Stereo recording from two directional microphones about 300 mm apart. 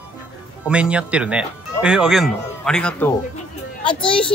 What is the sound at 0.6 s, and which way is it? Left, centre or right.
Speech, centre.